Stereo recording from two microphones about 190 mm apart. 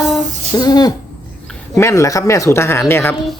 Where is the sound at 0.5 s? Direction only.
20° left (ahead or behind).